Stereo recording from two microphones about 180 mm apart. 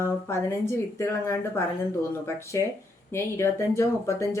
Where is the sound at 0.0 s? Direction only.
15° left (ahead or behind).